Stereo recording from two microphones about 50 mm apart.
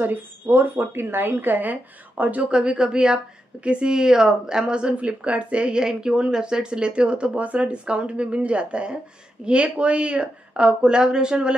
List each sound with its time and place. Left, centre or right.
0.0 s speech: right; by 11.5 s centre